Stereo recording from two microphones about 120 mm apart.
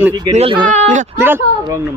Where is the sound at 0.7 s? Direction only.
90° right.